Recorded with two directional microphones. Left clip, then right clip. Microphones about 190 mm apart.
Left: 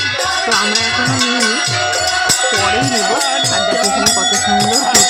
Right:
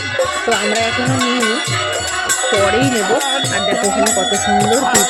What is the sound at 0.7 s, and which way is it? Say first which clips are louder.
Speech: left 2 dB; centre (ahead or behind).